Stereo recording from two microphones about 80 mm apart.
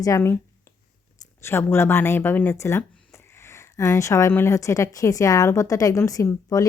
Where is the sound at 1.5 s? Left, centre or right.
Left.